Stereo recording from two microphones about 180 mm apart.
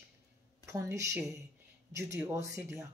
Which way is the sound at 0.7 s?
15° right (ahead or behind).